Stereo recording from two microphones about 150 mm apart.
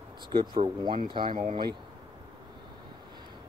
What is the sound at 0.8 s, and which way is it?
Speech, 30° right (ahead or behind).